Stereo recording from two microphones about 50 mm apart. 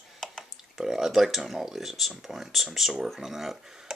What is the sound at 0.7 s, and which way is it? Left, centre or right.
Speech, centre.